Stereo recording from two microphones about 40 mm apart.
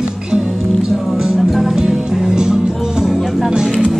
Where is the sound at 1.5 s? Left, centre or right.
Centre.